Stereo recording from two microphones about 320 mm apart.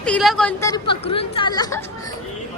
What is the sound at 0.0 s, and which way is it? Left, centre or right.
A woman's voice, centre.